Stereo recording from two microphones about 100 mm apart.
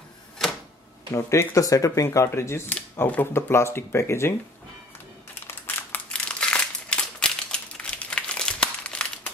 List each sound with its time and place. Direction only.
1.1 s speech: 30° left (ahead or behind)
5.5 s crumpling: 20° left (ahead or behind)
6.2 s crumpling: 10° left (ahead or behind)